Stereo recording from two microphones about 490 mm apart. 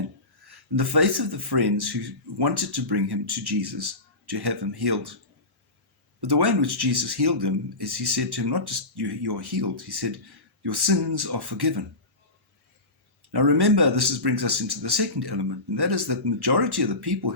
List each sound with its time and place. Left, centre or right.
0.4 s speech: right
6.2 s speech: right
13.3 s speech: right